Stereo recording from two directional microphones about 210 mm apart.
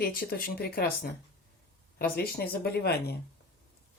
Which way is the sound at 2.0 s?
45° left (ahead or behind).